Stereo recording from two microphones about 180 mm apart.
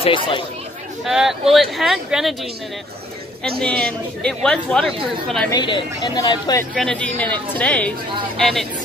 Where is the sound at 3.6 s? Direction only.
5° left (ahead or behind).